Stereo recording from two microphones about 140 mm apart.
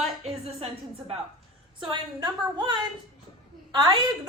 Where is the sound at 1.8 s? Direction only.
35° right (ahead or behind).